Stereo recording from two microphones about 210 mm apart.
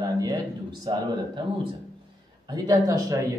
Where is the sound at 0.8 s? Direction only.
20° right (ahead or behind).